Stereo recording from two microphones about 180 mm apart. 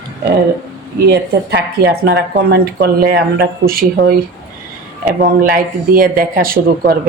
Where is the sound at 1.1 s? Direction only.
65° right (ahead or behind).